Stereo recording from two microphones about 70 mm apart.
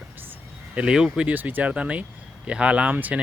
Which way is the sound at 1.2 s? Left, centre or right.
Right.